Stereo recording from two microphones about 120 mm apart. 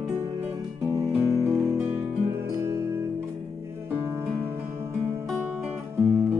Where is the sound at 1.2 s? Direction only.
25° right (ahead or behind).